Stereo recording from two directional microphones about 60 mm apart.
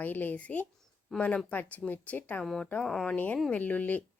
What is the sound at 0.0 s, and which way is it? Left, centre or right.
A woman's voice, left.